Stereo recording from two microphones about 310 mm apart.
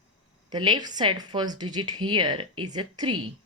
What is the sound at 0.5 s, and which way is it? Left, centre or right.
Speech, centre.